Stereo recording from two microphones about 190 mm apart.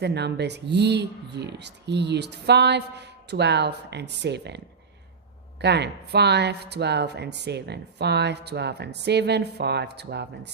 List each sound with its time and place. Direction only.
0.0 s speech: 60° right (ahead or behind)
5.6 s speech: 60° right (ahead or behind)